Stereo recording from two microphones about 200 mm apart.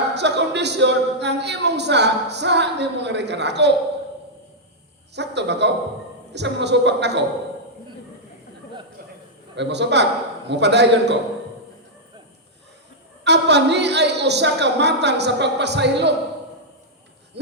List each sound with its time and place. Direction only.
0.1 s a man's voice: 60° right (ahead or behind)
5.1 s a man's voice: 60° right (ahead or behind)
9.6 s a man's voice: 60° right (ahead or behind)
13.2 s a man's voice: 60° right (ahead or behind)
17.4 s a sound: 60° right (ahead or behind)